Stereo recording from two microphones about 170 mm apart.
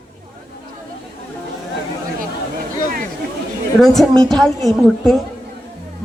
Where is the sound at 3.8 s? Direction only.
Centre (ahead or behind).